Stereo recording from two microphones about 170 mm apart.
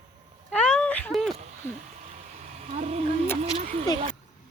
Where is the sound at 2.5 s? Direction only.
40° right (ahead or behind).